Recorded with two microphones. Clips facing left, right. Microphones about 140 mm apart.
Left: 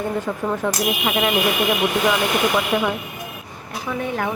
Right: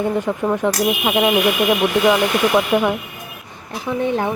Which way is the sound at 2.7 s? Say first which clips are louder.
Right 4 dB; 15° right (ahead or behind).